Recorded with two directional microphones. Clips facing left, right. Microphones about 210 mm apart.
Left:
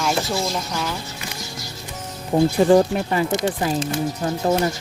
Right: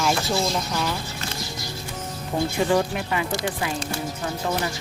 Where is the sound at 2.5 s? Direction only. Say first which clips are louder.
Left 6 dB; 35° left (ahead or behind).